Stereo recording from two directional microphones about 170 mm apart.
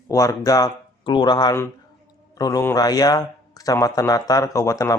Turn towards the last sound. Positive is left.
turn(degrees=20)  # may be behind; listen again after turning